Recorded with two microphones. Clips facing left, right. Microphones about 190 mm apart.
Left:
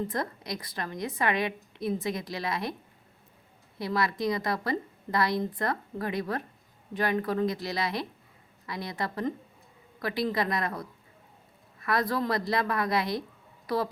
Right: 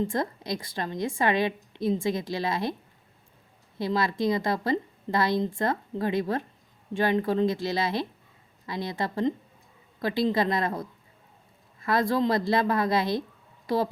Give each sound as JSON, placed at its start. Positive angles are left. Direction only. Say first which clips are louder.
{"t": 0.0, "sound": "a woman's voice", "louder": "right 4 dB", "side_deg": -25}
{"t": 3.8, "sound": "a woman's voice", "louder": "right 3 dB", "side_deg": -25}